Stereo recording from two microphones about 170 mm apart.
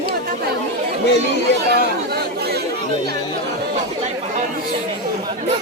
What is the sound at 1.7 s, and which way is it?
Chatter, 70° right (ahead or behind).